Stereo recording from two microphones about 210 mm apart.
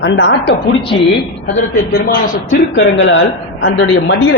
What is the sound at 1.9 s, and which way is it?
Speech, 40° left (ahead or behind).